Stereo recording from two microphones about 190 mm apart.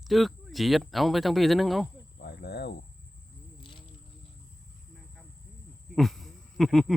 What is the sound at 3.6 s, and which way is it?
Insect, 25° left (ahead or behind).